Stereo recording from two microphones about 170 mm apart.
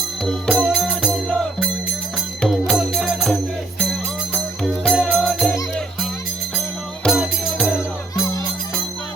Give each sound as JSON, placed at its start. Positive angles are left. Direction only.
{"t": 0.3, "sound": "music", "side_deg": 5}
{"t": 4.6, "sound": "music", "side_deg": 0}
{"t": 7.0, "sound": "music", "side_deg": 0}
{"t": 7.8, "sound": "music", "side_deg": 15}